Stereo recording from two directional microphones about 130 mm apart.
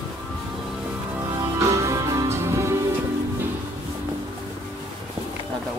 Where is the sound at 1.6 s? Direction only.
25° right (ahead or behind).